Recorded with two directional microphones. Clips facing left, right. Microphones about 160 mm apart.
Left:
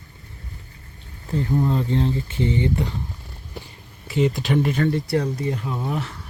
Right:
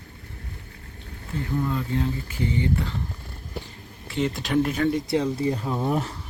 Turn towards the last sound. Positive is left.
turn(degrees=-35)  # may be behind; listen again after turning